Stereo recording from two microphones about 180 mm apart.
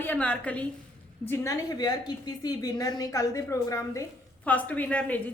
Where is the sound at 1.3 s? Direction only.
20° left (ahead or behind).